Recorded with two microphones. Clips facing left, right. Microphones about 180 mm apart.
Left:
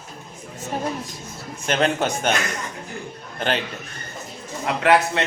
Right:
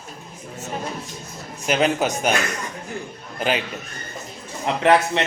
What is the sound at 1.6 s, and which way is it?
Speech, 5° right (ahead or behind).